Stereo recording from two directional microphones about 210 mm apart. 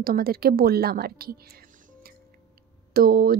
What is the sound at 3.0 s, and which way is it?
Speech, 45° right (ahead or behind).